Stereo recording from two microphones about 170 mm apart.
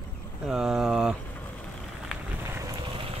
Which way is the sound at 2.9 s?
30° right (ahead or behind).